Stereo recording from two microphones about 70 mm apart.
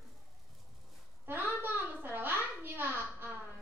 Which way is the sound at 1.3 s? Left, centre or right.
Right.